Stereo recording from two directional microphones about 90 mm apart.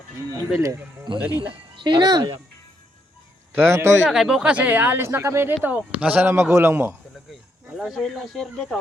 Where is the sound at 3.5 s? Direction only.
30° right (ahead or behind).